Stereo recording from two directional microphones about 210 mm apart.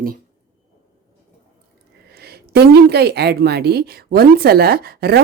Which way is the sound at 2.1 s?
50° right (ahead or behind).